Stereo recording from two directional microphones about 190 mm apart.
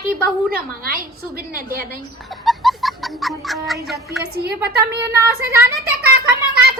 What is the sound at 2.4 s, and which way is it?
Music, centre (ahead or behind).